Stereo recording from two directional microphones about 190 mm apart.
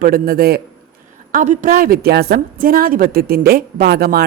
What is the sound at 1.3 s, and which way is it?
Speech, 40° right (ahead or behind).